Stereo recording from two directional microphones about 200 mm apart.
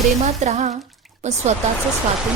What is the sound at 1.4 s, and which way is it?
Speech, 35° right (ahead or behind).